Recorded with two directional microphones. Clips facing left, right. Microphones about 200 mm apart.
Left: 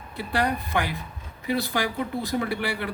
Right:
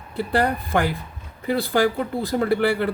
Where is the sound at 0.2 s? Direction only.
50° right (ahead or behind).